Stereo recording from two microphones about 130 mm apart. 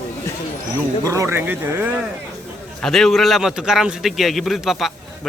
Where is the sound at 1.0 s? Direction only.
25° right (ahead or behind).